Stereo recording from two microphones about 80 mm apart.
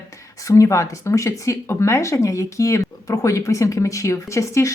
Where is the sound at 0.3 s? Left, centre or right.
Left.